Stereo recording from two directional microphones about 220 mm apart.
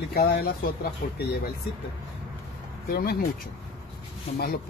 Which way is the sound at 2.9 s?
45° left (ahead or behind).